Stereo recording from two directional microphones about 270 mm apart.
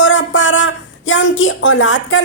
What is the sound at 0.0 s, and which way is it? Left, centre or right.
A woman's voice, left.